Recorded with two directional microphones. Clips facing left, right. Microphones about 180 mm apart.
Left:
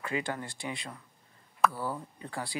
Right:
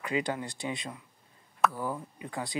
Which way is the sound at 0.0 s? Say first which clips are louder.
Right 3 dB; 20° right (ahead or behind).